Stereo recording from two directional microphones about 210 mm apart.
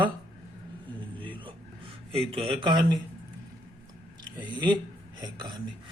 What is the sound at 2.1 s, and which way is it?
Speech, 25° right (ahead or behind).